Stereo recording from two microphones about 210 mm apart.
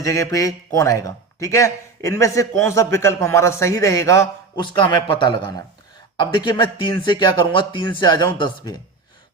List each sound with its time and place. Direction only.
0.0 s a man's voice: 15° left (ahead or behind)